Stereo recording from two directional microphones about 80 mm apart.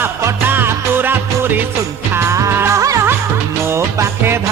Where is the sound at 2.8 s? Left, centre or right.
Right.